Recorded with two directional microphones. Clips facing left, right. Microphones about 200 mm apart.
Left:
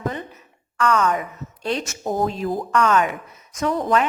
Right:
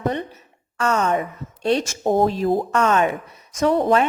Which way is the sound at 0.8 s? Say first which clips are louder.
Even; 25° right (ahead or behind).